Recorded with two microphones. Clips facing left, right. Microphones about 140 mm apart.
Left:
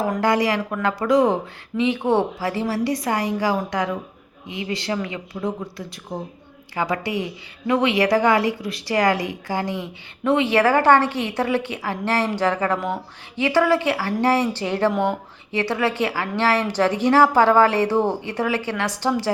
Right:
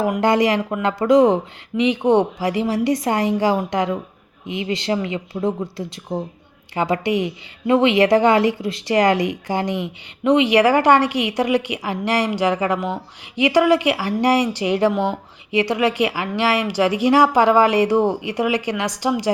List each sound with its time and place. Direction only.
0.2 s a woman's voice: 20° right (ahead or behind)